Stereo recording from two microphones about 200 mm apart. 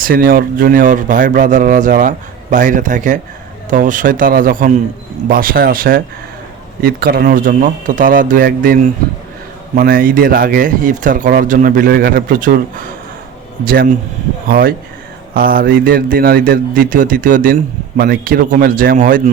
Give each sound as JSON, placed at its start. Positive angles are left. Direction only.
{"t": 0.0, "sound": "a man's voice", "side_deg": -45}